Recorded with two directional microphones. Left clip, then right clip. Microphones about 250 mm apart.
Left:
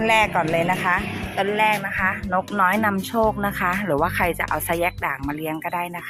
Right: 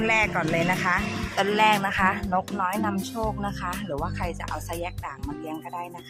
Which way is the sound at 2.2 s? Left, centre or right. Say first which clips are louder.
Left 6 dB; centre.